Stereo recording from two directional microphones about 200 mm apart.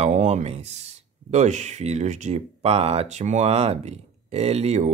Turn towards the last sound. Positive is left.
turn(degrees=-35)  # may be behind; listen again after turning